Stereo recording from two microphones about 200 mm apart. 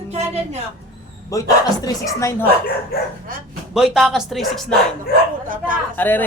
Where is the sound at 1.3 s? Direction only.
15° left (ahead or behind).